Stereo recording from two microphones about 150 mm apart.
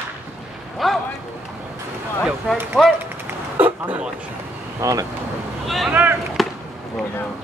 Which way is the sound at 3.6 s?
10° right (ahead or behind).